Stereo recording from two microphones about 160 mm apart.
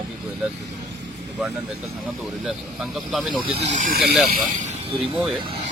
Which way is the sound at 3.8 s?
70° right (ahead or behind).